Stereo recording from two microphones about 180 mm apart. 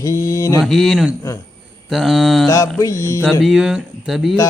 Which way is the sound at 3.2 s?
Centre (ahead or behind).